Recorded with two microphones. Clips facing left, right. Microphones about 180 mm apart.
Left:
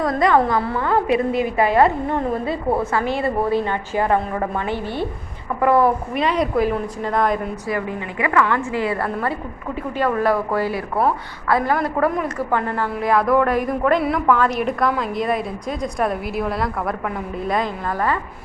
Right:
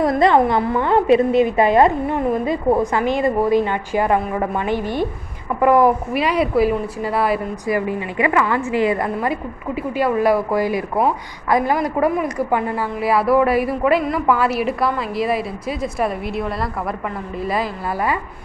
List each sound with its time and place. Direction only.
0.0 s a woman's voice: 25° right (ahead or behind); by 18.2 s 5° right (ahead or behind)